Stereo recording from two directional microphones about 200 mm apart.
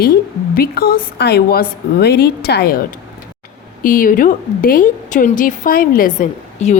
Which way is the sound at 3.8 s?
45° left (ahead or behind).